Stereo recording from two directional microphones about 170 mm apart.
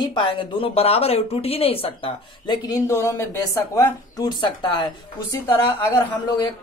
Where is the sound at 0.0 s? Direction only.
30° left (ahead or behind).